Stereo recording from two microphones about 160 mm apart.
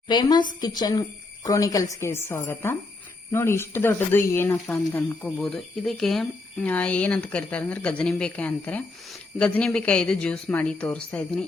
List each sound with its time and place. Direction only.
0.1 s a woman's voice: 25° left (ahead or behind); by 11.4 s 10° left (ahead or behind)